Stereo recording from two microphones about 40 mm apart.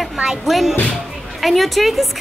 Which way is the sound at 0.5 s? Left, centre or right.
Centre.